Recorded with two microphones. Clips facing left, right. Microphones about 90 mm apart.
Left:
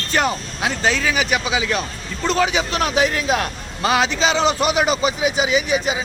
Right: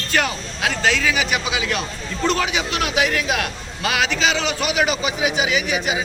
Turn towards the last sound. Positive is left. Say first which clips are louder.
# left 2 dB
turn(degrees=35)  # may be behind; listen again after turning